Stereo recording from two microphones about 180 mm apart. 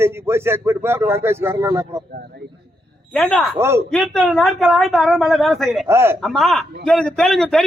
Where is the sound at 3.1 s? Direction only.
5° left (ahead or behind).